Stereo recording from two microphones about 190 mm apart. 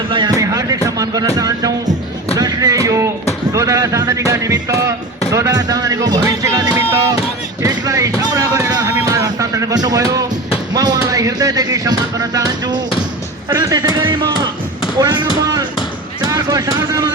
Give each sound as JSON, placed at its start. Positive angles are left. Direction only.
{"t": 0.1, "sound": "a sound", "side_deg": -20}
{"t": 1.4, "sound": "speech", "side_deg": -20}
{"t": 2.4, "sound": "music", "side_deg": -20}
{"t": 3.5, "sound": "speech", "side_deg": -15}
{"t": 16.2, "sound": "vehicle", "side_deg": -20}